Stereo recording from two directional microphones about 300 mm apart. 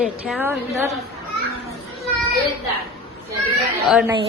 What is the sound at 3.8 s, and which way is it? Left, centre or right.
Speech, centre.